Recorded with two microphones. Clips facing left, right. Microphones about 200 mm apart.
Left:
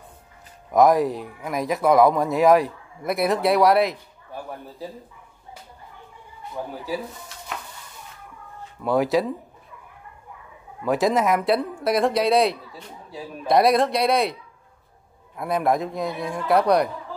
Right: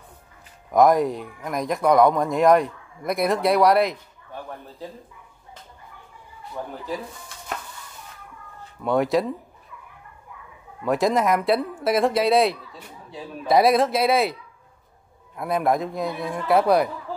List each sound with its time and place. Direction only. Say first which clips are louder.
0.7 s speech: even; centre (ahead or behind)
4.4 s a man's voice: left 2 dB; 15° left (ahead or behind)
6.5 s speech: left 1 dB; 5° left (ahead or behind)
8.8 s speech: even; centre (ahead or behind)
10.8 s speech: even; centre (ahead or behind)
15.3 s speech: even; centre (ahead or behind)